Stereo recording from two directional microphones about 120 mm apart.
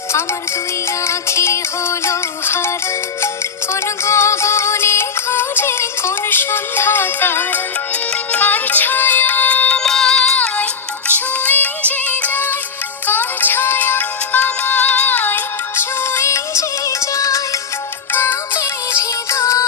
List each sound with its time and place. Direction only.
1.0 s music: 25° left (ahead or behind)